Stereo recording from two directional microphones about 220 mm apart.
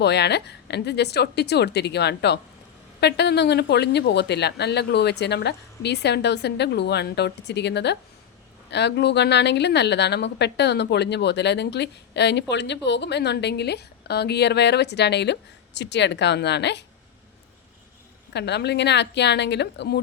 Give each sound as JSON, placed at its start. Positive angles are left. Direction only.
{"t": 0.0, "sound": "a woman's voice", "side_deg": 50}
{"t": 18.3, "sound": "a woman's voice", "side_deg": 50}